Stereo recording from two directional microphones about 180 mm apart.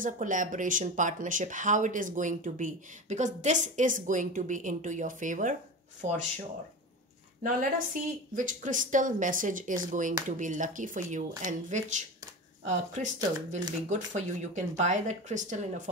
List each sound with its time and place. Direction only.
0.0 s speech: 45° right (ahead or behind)
7.4 s speech: 45° right (ahead or behind)